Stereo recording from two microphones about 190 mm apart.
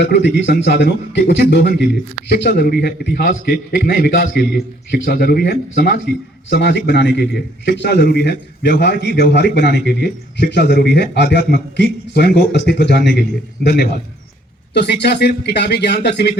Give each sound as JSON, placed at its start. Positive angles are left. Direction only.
{"t": 0.0, "sound": "a man's voice", "side_deg": 65}
{"t": 14.7, "sound": "a man's voice", "side_deg": 60}